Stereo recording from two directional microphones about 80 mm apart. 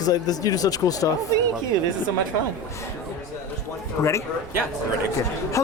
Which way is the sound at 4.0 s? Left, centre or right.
Left.